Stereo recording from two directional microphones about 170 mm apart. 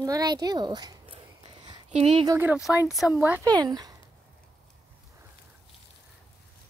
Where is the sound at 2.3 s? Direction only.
10° right (ahead or behind).